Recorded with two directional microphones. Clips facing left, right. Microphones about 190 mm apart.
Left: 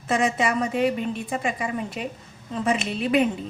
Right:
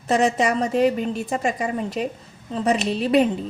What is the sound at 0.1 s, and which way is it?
Speech, 40° right (ahead or behind).